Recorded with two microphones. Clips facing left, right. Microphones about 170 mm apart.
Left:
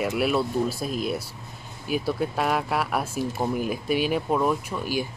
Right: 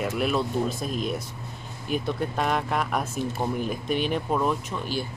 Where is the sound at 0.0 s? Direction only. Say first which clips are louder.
Left 2 dB; 5° left (ahead or behind).